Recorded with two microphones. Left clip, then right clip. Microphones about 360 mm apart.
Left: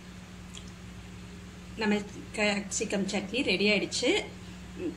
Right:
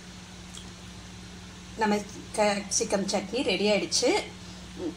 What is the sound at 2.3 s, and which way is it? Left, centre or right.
A woman's voice, right.